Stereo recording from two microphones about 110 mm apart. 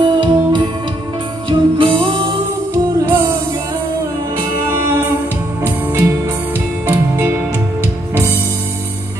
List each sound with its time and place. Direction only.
0.0 s music: 45° right (ahead or behind)
2.7 s music: 25° right (ahead or behind)
5.6 s music: 25° right (ahead or behind)